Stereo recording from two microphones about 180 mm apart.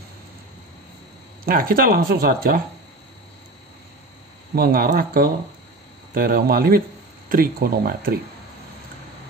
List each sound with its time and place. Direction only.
1.4 s speech: 55° right (ahead or behind)
4.6 s speech: 55° right (ahead or behind)